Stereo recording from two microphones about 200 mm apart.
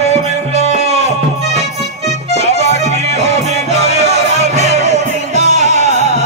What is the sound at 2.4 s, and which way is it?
Music, 35° left (ahead or behind).